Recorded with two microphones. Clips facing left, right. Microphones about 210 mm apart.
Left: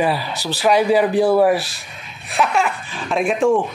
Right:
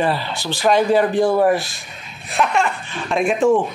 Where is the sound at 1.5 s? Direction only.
35° left (ahead or behind).